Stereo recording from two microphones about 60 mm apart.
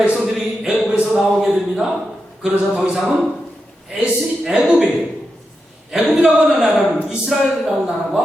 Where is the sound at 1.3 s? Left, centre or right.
Centre.